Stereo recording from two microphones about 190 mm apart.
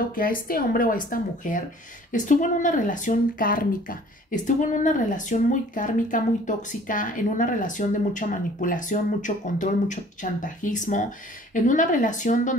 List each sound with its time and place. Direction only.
0.1 s speech: 50° left (ahead or behind)